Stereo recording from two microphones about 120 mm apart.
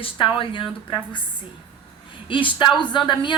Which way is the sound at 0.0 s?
45° left (ahead or behind).